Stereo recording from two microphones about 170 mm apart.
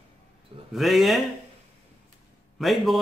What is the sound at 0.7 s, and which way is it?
Speech, centre (ahead or behind).